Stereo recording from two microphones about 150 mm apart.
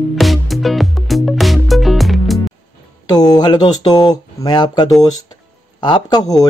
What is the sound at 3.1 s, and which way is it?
Speech, 25° left (ahead or behind).